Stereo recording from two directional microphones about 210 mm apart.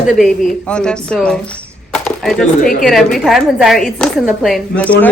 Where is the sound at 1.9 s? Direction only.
5° left (ahead or behind).